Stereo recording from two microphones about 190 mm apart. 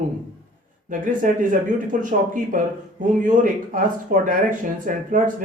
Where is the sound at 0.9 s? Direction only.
45° right (ahead or behind).